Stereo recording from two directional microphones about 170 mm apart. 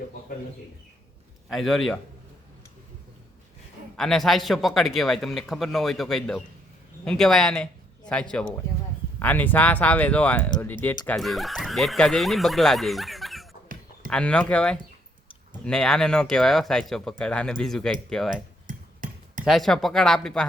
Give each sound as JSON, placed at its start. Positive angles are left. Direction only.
{"t": 1.5, "sound": "speech", "side_deg": 0}
{"t": 3.9, "sound": "a man's voice", "side_deg": 0}
{"t": 18.7, "sound": "a sound", "side_deg": -50}
{"t": 19.5, "sound": "speech", "side_deg": 0}